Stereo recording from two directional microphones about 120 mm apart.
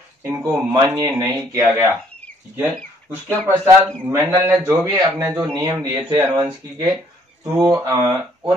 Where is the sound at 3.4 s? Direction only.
20° right (ahead or behind).